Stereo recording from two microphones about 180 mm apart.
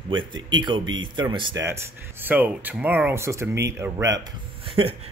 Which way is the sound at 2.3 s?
10° right (ahead or behind).